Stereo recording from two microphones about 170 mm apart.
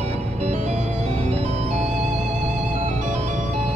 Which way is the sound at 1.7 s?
40° right (ahead or behind).